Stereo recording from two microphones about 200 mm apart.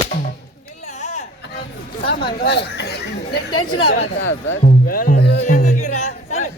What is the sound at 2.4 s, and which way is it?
Speech, 55° left (ahead or behind).